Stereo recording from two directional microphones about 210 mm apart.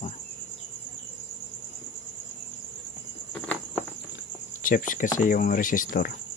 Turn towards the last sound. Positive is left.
turn(degrees=40)  # may be behind; listen again after turning